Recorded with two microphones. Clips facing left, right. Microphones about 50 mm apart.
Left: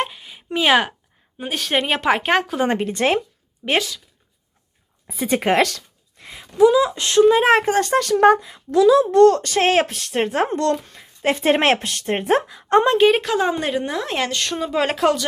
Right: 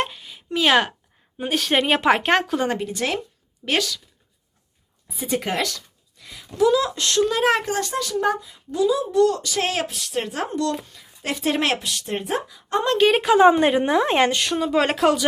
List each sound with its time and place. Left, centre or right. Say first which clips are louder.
0.0 s a sound: left 1 dB; centre
0.3 s a sound: left 1 dB; centre
0.7 s a woman's voice: left 2 dB; centre
2.6 s speech: left 5 dB; left
3.7 s speech: left 2 dB; left
5.0 s speech: left 6 dB; left
6.2 s a sound: left 3 dB; left
6.6 s speech: left 4 dB; centre; by 12.8 s left
13.0 s speech: left 2 dB; centre
13.2 s a woman's voice: right 6 dB; centre
14.3 s speech: right 1 dB; centre